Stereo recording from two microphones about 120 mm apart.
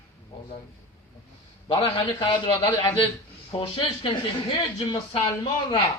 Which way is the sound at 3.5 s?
50° left (ahead or behind).